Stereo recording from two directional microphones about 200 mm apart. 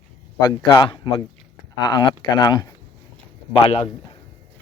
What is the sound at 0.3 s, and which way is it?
Speech, 20° left (ahead or behind).